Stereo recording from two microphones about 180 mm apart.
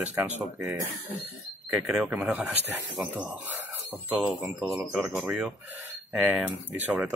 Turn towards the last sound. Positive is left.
turn(degrees=-5)  # may be behind; listen again after turning